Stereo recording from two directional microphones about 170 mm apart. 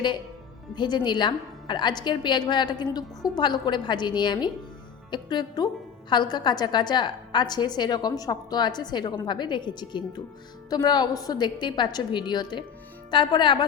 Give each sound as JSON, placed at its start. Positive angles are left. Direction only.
{"t": 0.8, "sound": "a woman's voice", "side_deg": 25}